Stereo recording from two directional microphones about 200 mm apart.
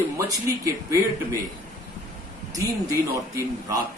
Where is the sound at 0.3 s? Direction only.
15° right (ahead or behind).